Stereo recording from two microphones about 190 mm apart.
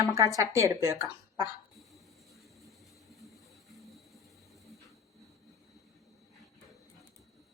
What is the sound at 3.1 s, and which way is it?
Vehicle, centre (ahead or behind).